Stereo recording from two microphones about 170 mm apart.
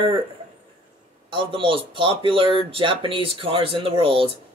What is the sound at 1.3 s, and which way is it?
Speech, 30° right (ahead or behind).